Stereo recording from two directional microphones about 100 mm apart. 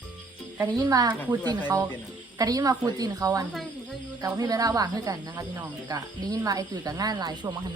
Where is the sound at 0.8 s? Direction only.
35° right (ahead or behind).